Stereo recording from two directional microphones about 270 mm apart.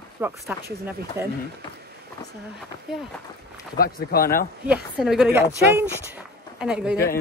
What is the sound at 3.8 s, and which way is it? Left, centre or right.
Speech, left.